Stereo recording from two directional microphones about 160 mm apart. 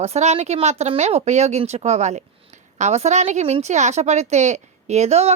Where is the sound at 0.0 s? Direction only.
40° right (ahead or behind).